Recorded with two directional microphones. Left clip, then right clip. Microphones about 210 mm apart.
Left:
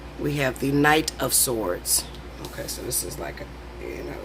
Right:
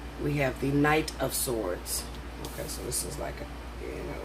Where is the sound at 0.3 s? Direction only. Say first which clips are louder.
Left 4 dB; 45° left (ahead or behind).